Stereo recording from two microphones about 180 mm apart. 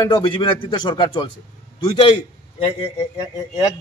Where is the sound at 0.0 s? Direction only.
25° left (ahead or behind).